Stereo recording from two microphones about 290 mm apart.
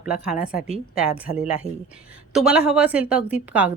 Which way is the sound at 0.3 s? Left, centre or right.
Left.